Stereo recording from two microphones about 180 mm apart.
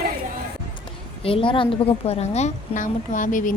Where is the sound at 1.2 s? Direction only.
30° left (ahead or behind).